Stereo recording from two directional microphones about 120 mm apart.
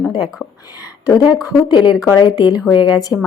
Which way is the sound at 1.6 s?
35° left (ahead or behind).